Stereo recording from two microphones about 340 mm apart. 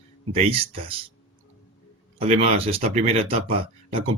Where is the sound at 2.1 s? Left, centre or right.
Centre.